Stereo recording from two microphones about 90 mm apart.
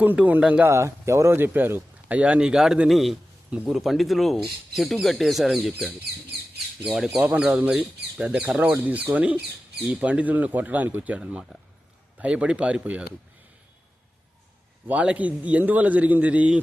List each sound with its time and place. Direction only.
0.0 s a man's voice: 20° right (ahead or behind)
0.6 s a man's voice: 30° right (ahead or behind); by 5.5 s centre (ahead or behind)
6.8 s speech: 5° right (ahead or behind)
7.2 s a man's voice: 15° right (ahead or behind)
14.8 s a man's voice: 15° right (ahead or behind)